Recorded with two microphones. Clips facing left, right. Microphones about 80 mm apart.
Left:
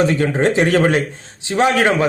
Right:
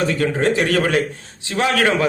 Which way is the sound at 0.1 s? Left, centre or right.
Left.